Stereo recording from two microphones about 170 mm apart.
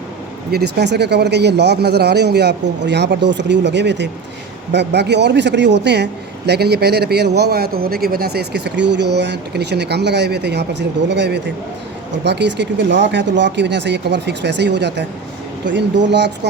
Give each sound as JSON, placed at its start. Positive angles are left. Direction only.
{"t": 0.5, "sound": "a man's voice", "side_deg": -80}